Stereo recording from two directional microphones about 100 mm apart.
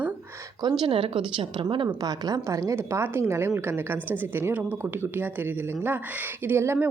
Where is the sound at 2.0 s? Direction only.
40° right (ahead or behind).